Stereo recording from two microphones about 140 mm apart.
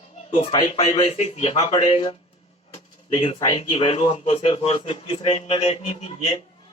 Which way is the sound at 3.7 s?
40° left (ahead or behind).